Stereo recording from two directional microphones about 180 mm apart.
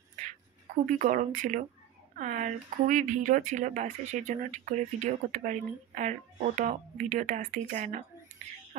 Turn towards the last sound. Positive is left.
turn(degrees=-40)  # may be behind; listen again after turning